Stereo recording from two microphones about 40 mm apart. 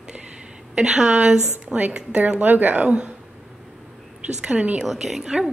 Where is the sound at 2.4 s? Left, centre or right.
Right.